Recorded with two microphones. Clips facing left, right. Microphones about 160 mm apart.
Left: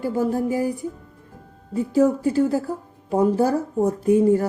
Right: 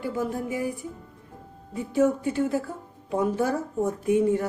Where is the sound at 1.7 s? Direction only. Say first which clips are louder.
Left 4 dB; 35° left (ahead or behind).